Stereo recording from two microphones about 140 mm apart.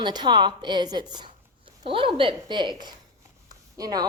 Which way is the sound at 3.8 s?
25° right (ahead or behind).